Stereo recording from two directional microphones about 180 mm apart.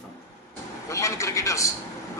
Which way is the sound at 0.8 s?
15° left (ahead or behind).